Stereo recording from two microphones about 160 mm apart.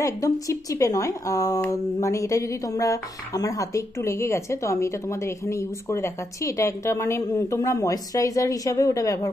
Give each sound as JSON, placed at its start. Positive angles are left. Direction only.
{"t": 0.0, "sound": "speech", "side_deg": 20}